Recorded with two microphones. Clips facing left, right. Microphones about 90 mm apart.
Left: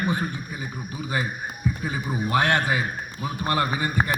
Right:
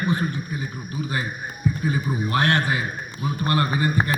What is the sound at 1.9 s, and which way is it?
A man's voice, 15° left (ahead or behind).